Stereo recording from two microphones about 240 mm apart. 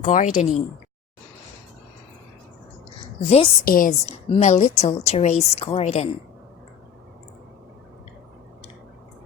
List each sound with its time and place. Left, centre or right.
0.0 s speech: left
3.2 s a woman's voice: left